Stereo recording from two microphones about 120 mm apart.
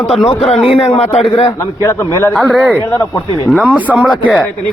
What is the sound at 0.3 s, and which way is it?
A man's voice, 55° left (ahead or behind).